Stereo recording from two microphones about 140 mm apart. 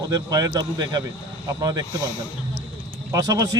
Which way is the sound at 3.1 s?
25° right (ahead or behind).